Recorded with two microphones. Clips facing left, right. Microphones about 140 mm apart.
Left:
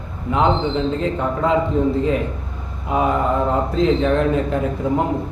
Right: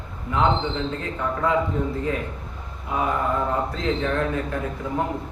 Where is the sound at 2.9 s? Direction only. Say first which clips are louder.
Left 5 dB; 20° left (ahead or behind).